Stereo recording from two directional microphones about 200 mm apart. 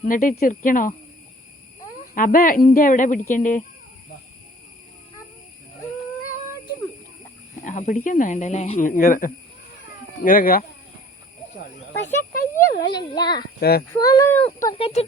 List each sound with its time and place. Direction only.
0.0 s speech: 45° left (ahead or behind)
2.1 s a woman's voice: 45° left (ahead or behind)
7.6 s snake: 40° left (ahead or behind)
8.0 s a woman's voice: 40° left (ahead or behind)
12.3 s a sound: 50° left (ahead or behind)
13.0 s a child's voice: 20° left (ahead or behind)
13.6 s speech: 50° left (ahead or behind)
13.9 s speech: 15° left (ahead or behind)
14.7 s a child's voice: 30° left (ahead or behind)